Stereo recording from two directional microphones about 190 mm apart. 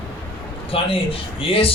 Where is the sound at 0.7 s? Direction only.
30° left (ahead or behind).